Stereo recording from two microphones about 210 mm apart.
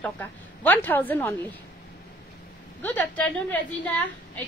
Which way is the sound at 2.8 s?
5° left (ahead or behind).